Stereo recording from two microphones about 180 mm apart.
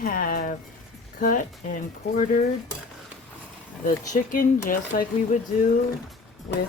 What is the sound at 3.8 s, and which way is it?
Speech, 45° left (ahead or behind).